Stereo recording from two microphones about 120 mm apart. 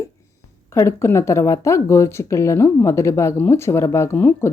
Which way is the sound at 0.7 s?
25° left (ahead or behind).